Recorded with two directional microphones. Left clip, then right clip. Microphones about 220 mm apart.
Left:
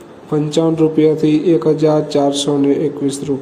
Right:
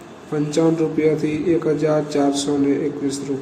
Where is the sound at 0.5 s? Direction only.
20° left (ahead or behind).